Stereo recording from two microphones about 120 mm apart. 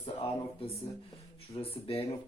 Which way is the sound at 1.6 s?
55° left (ahead or behind).